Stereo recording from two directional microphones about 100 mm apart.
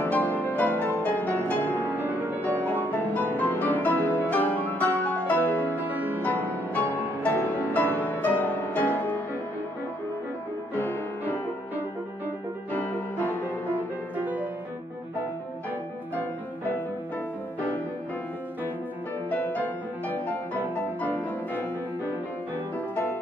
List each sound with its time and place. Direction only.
0.0 s music: 15° left (ahead or behind)
1.9 s music: 15° right (ahead or behind)
2.6 s music: 15° left (ahead or behind)
5.8 s music: 15° right (ahead or behind)
6.2 s music: 15° left (ahead or behind)
10.7 s music: 20° left (ahead or behind)
12.7 s music: 15° left (ahead or behind)
14.1 s music: 15° right (ahead or behind)
17.6 s music: 15° left (ahead or behind)
19.3 s music: 15° left (ahead or behind)